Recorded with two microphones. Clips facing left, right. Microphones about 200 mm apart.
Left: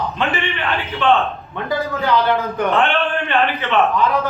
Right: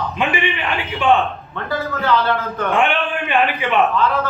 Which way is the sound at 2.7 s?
15° right (ahead or behind).